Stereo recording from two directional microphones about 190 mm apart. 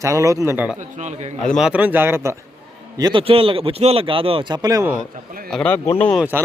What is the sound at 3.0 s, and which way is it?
Speech, 25° right (ahead or behind).